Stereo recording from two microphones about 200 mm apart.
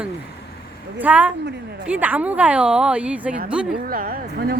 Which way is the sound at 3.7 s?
45° right (ahead or behind).